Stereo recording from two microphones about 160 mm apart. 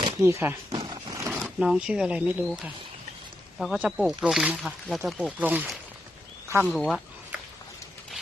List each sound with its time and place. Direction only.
0.2 s speech: 15° right (ahead or behind)
1.1 s a sound: 15° right (ahead or behind)
1.5 s speech: 5° right (ahead or behind)
6.7 s speech: centre (ahead or behind)